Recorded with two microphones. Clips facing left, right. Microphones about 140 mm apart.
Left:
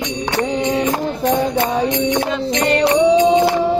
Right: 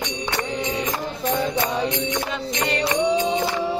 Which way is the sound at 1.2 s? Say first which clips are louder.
Left 5 dB; 55° left (ahead or behind).